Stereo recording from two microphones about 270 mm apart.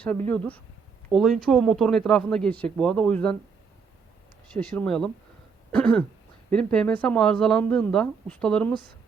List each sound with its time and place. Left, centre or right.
0.3 s speech: centre
4.5 s speech: centre